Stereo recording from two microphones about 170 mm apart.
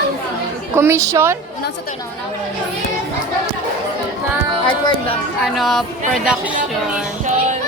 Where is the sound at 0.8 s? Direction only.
15° right (ahead or behind).